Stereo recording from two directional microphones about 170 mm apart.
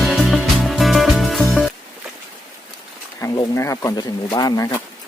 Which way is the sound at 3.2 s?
20° left (ahead or behind).